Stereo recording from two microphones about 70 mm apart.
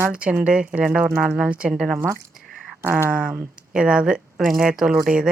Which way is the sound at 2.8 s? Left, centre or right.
Right.